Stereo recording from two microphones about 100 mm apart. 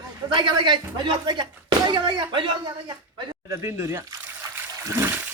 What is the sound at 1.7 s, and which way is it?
Slap, 45° right (ahead or behind).